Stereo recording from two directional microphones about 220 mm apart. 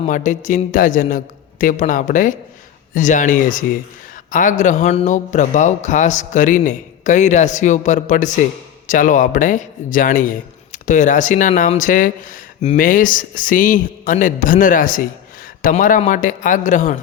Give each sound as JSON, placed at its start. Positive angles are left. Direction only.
{"t": 0.1, "sound": "speech", "side_deg": 35}